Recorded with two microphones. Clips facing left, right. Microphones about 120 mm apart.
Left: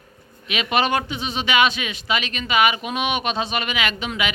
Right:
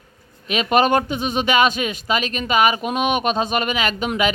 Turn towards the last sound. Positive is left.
turn(degrees=-40)  # may be behind; listen again after turning